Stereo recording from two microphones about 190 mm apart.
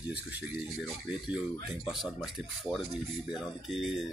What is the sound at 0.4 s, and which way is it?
Speech, 5° right (ahead or behind).